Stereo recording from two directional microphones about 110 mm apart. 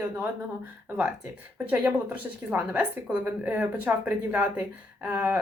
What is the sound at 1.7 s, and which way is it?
Speech, 15° right (ahead or behind).